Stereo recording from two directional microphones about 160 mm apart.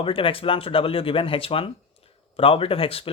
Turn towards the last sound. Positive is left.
turn(degrees=35)  # may be behind; listen again after turning